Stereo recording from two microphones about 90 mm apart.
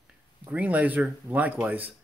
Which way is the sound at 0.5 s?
15° right (ahead or behind).